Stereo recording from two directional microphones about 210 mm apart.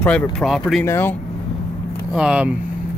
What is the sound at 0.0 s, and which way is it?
Speech, 5° left (ahead or behind).